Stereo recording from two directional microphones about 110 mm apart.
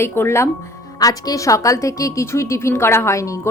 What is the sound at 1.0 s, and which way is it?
A woman's voice, 35° left (ahead or behind).